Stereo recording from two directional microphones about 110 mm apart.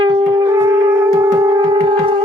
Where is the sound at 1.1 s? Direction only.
30° right (ahead or behind).